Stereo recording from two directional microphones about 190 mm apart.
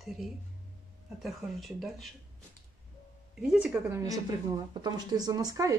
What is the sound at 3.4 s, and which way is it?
A woman's voice, 5° right (ahead or behind).